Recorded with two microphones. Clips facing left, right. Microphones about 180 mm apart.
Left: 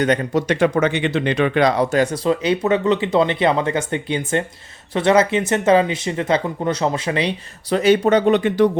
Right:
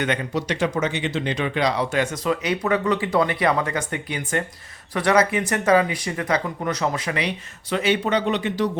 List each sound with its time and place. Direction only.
0.0 s speech: 40° left (ahead or behind)